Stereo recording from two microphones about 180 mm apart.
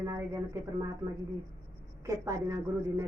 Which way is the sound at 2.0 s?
15° right (ahead or behind).